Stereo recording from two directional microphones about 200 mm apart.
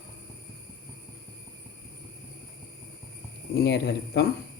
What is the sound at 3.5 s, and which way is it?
Speech, 55° left (ahead or behind).